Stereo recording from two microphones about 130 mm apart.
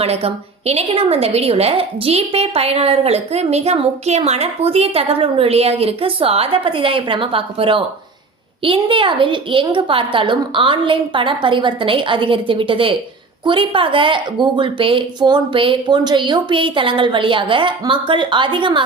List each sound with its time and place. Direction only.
0.0 s a woman's voice: 50° right (ahead or behind)